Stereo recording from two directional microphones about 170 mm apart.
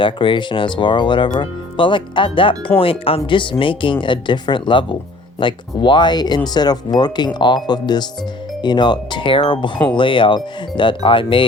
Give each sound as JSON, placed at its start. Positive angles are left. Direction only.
{"t": 0.0, "sound": "speech", "side_deg": 30}
{"t": 9.7, "sound": "speech", "side_deg": 10}
{"t": 10.0, "sound": "speech", "side_deg": 30}